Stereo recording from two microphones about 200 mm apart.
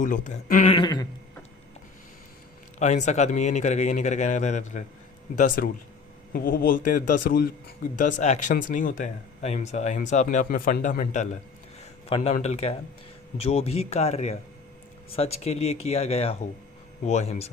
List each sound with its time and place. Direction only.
0.0 s speech: 40° left (ahead or behind); by 1.0 s 25° left (ahead or behind)
2.7 s a man's voice: 35° left (ahead or behind)
7.9 s speech: 40° left (ahead or behind)